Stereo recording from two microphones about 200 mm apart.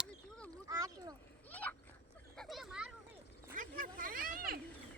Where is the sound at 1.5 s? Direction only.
10° left (ahead or behind).